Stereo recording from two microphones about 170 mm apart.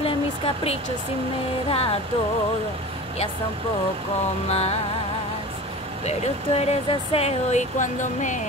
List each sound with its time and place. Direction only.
1.7 s speech: 35° left (ahead or behind)
4.5 s speech: 40° left (ahead or behind)
6.0 s speech: 40° left (ahead or behind)